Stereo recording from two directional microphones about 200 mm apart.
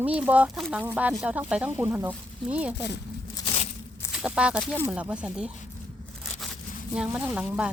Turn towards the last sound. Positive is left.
turn(degrees=-5)  # may be behind; listen again after turning